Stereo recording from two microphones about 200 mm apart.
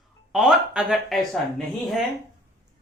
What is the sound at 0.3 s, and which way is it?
Speech, centre (ahead or behind).